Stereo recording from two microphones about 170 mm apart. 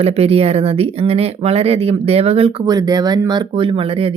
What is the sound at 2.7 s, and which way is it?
Speech, 20° right (ahead or behind).